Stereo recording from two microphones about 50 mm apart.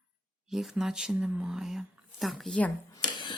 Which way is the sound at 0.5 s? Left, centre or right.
Centre.